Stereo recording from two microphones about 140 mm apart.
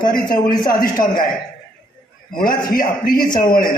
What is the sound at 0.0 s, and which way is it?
A man's voice, 85° left.